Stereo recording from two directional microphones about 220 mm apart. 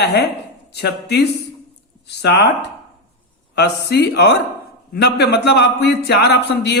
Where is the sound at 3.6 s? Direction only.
50° left (ahead or behind).